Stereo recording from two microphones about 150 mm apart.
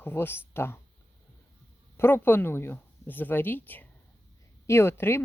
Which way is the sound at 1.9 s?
15° left (ahead or behind).